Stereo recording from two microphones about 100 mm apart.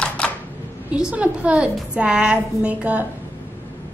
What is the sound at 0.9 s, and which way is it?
A woman's voice, 10° right (ahead or behind).